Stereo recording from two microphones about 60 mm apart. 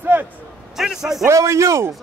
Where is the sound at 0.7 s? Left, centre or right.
Centre.